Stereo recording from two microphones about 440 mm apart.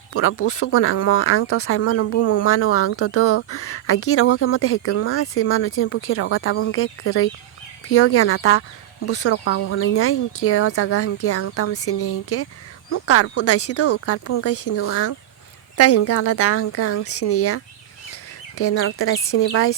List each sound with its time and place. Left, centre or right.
0.1 s speech: left